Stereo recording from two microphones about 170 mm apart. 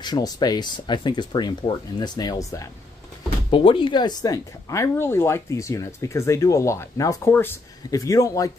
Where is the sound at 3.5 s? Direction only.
30° left (ahead or behind).